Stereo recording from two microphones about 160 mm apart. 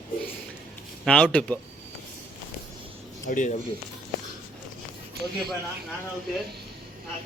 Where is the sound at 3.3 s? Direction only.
55° left (ahead or behind).